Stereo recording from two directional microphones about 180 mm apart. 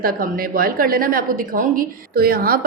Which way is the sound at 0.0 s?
55° right (ahead or behind).